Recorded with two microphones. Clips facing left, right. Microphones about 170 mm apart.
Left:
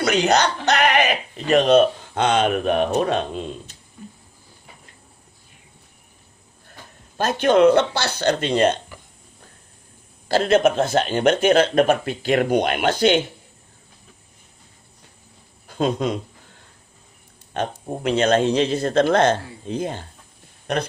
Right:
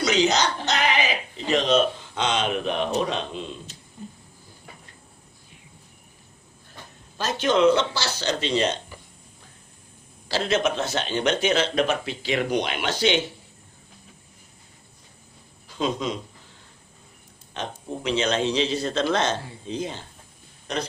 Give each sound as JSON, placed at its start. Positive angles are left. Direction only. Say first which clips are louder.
{"t": 0.0, "sound": "speech", "louder": "left 3 dB", "side_deg": 60}
{"t": 4.0, "sound": "a sound", "louder": "right 1 dB", "side_deg": -20}
{"t": 7.2, "sound": "speech", "louder": "left 5 dB", "side_deg": 55}
{"t": 10.2, "sound": "speech", "louder": "left 7 dB", "side_deg": 50}
{"t": 15.6, "sound": "speech", "louder": "left 5 dB", "side_deg": 55}
{"t": 17.5, "sound": "speech", "louder": "left 6 dB", "side_deg": 50}